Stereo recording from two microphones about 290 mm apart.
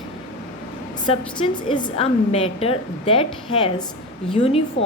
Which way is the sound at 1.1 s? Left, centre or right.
Centre.